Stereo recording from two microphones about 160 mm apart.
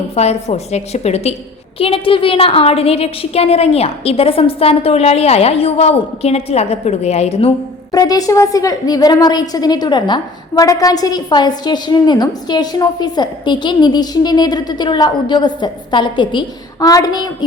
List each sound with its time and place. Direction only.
0.1 s a woman's voice: 40° left (ahead or behind)
7.9 s a woman's voice: 25° left (ahead or behind)